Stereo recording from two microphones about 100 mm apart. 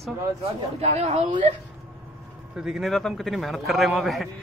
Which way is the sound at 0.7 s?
90° right.